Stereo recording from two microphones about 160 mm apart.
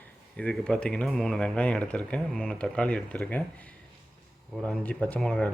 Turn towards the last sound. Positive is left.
turn(degrees=5)  # may be behind; listen again after turning